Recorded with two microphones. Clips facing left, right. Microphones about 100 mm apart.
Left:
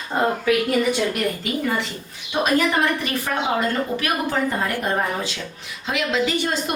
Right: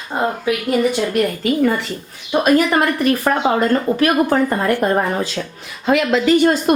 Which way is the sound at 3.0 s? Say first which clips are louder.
Right 8 dB; 45° right (ahead or behind).